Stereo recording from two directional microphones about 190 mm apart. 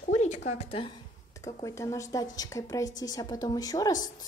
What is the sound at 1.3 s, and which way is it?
A woman's voice, 15° left (ahead or behind).